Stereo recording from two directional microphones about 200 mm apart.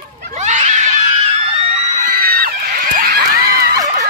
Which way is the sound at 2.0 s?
50° right (ahead or behind).